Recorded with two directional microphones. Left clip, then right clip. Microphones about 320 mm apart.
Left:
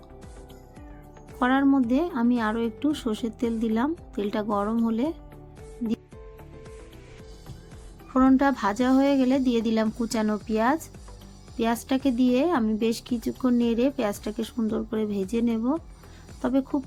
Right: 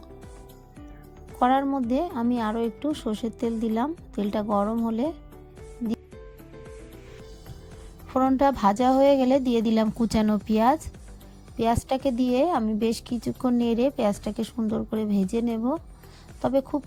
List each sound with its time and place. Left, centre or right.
1.4 s speech: right
8.1 s speech: right